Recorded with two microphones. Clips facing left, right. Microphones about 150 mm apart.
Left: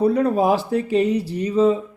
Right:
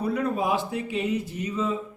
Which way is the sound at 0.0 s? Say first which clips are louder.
Left 8 dB; 35° left (ahead or behind).